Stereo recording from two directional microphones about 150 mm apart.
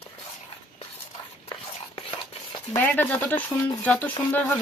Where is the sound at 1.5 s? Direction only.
40° left (ahead or behind).